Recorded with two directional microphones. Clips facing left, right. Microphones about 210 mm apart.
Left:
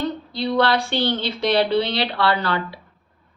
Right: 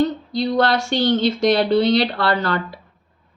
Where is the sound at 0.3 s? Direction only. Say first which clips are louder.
Right 2 dB; 45° right (ahead or behind).